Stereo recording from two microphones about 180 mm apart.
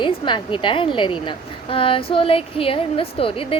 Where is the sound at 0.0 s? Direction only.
25° left (ahead or behind).